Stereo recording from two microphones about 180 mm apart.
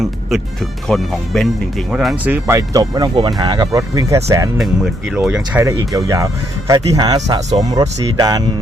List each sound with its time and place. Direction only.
0.0 s music: centre (ahead or behind)
0.9 s speech: centre (ahead or behind); by 4.4 s 15° right (ahead or behind)
4.5 s speech: centre (ahead or behind)
5.5 s speech: 15° right (ahead or behind)